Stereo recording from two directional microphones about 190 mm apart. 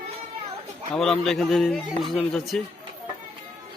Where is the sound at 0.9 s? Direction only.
Centre (ahead or behind).